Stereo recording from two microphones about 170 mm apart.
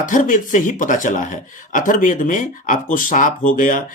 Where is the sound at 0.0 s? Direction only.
50° left (ahead or behind).